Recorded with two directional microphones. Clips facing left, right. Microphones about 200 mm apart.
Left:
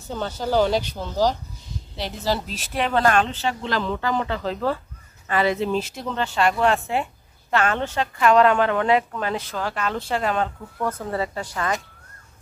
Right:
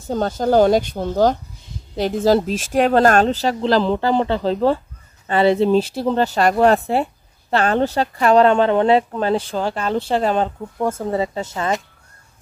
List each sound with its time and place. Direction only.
0.1 s speech: 45° right (ahead or behind); by 11.7 s 25° right (ahead or behind)